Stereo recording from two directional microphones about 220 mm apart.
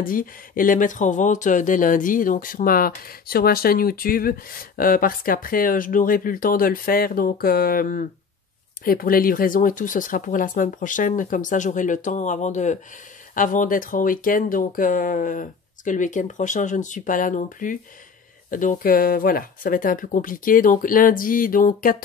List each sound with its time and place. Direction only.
0.0 s speech: 40° left (ahead or behind)